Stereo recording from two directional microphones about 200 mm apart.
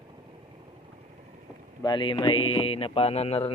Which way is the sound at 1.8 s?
20° left (ahead or behind).